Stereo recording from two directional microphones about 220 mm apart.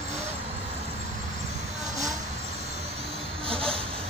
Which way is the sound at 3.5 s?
25° right (ahead or behind).